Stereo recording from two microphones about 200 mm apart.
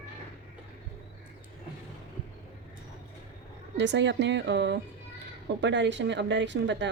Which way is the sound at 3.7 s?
60° right (ahead or behind).